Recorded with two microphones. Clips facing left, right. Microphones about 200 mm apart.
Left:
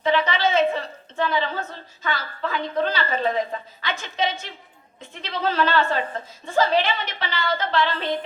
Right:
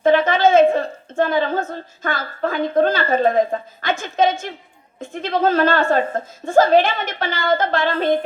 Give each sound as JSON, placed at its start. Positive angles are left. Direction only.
{"t": 0.0, "sound": "a woman's voice", "side_deg": -50}